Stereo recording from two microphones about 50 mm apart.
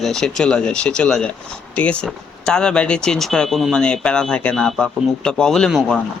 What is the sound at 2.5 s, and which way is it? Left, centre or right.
Speech, centre.